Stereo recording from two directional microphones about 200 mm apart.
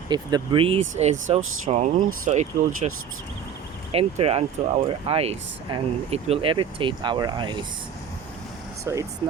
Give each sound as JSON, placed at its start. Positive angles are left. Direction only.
{"t": 0.1, "sound": "speech", "side_deg": -20}
{"t": 3.9, "sound": "speech", "side_deg": -30}
{"t": 8.8, "sound": "speech", "side_deg": -15}